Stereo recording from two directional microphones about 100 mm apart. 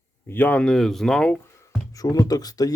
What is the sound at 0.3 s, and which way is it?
Speech, 20° left (ahead or behind).